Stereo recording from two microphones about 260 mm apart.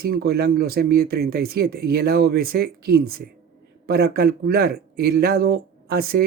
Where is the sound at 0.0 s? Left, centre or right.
Right.